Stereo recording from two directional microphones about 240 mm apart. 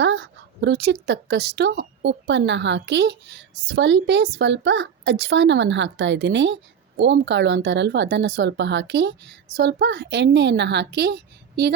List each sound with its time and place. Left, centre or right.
0.0 s a woman's voice: right